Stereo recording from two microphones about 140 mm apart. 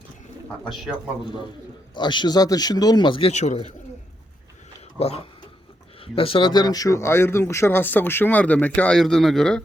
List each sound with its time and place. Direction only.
0.4 s speech: 5° left (ahead or behind)
1.2 s a man's voice: 35° left (ahead or behind); by 3.6 s 55° left (ahead or behind)
4.9 s speech: 45° left (ahead or behind); by 9.6 s 5° left (ahead or behind)